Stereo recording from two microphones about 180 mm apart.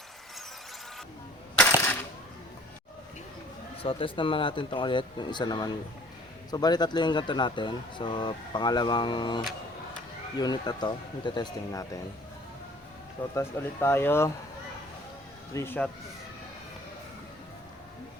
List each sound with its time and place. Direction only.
1.5 s coin: 10° left (ahead or behind)
3.8 s speech: 30° left (ahead or behind)
13.3 s speech: 15° left (ahead or behind)
15.5 s speech: 10° left (ahead or behind)